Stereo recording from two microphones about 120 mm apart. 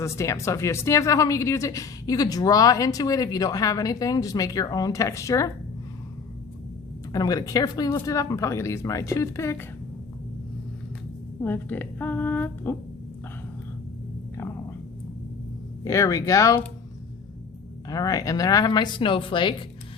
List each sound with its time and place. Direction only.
0.0 s speech: 25° left (ahead or behind)
7.1 s speech: 30° left (ahead or behind)
11.3 s a woman's voice: 15° left (ahead or behind)
14.3 s a sound: 20° left (ahead or behind)
15.8 s speech: 25° left (ahead or behind)
17.8 s speech: 30° left (ahead or behind)